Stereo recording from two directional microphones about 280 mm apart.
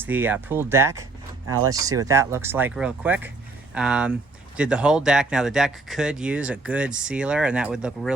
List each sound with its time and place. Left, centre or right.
0.0 s speech: centre
1.5 s speech: right
1.7 s speech: centre